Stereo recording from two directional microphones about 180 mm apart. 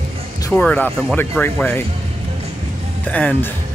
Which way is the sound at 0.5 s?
10° left (ahead or behind).